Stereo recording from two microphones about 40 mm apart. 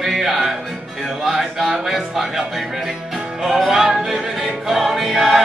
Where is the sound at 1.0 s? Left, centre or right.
Centre.